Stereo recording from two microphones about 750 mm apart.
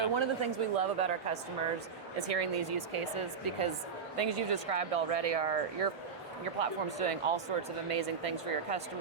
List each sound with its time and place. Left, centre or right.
0.1 s speech: right
2.1 s speech: right